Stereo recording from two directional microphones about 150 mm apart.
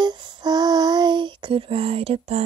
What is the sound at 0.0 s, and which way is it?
Female singing, 30° right (ahead or behind).